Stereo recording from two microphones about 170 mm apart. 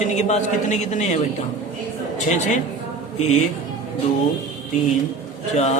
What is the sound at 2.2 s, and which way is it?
Speech, 45° left (ahead or behind).